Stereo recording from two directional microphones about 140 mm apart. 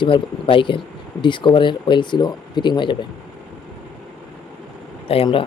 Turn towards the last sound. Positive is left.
turn(degrees=40)  # may be behind; listen again after turning